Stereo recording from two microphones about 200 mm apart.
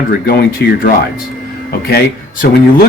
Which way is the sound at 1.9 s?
50° left (ahead or behind).